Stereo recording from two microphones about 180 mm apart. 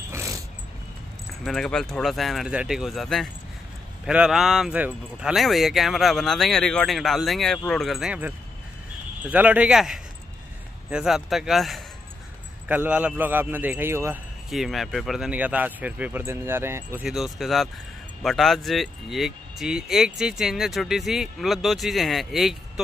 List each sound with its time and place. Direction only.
0.1 s a sound: 15° right (ahead or behind)
1.4 s speech: centre (ahead or behind)
9.3 s a man's voice: 10° right (ahead or behind)
14.5 s speech: centre (ahead or behind)